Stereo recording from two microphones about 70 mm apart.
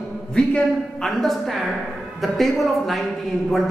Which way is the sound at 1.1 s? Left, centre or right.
Centre.